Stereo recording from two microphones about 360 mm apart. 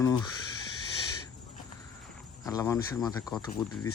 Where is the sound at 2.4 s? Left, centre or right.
Centre.